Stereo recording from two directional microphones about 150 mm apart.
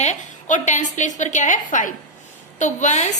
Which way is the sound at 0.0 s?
50° left (ahead or behind).